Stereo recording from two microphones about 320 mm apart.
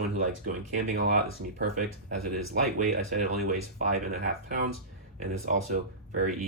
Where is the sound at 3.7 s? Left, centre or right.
Right.